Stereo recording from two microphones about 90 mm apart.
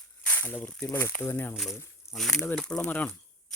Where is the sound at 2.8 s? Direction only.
20° left (ahead or behind).